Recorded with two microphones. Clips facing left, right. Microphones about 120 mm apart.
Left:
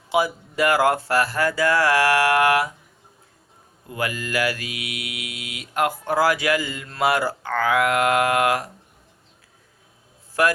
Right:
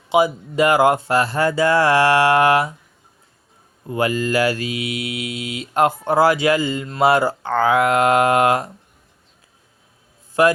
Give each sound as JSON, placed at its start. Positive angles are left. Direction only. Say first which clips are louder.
{"t": 0.1, "sound": "mantra", "louder": "right 5 dB", "side_deg": -20}
{"t": 3.8, "sound": "mantra", "louder": "right 8 dB", "side_deg": -30}
{"t": 10.4, "sound": "mantra", "louder": "right 5 dB", "side_deg": -20}